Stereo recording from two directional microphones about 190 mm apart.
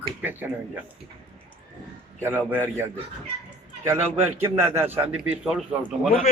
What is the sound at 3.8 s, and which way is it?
A man's voice, 15° right (ahead or behind).